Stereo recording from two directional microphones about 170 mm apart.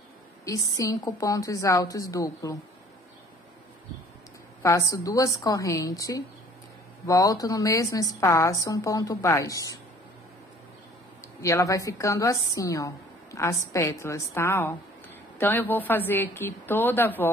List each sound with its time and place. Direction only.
0.5 s a woman's voice: 20° left (ahead or behind)
4.6 s a woman's voice: 20° left (ahead or behind)
11.4 s a woman's voice: 20° left (ahead or behind)